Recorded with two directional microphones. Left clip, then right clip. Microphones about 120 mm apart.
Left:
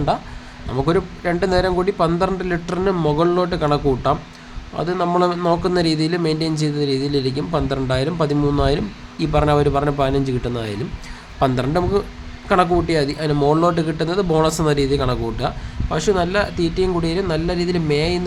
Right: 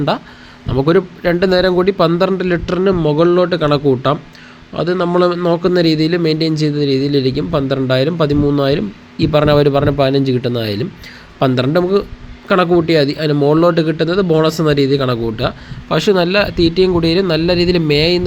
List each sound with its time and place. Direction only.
0.7 s speech: 20° right (ahead or behind)
2.9 s a man's voice: 10° right (ahead or behind)
15.9 s speech: 35° right (ahead or behind)